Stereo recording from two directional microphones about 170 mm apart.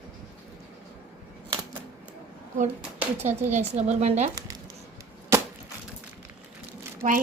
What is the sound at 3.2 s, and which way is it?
A woman's voice, 45° right (ahead or behind).